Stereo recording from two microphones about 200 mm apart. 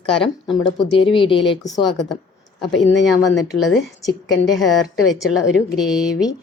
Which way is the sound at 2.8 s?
65° left (ahead or behind).